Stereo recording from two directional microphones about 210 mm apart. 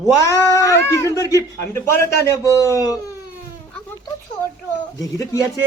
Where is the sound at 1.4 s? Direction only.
15° left (ahead or behind).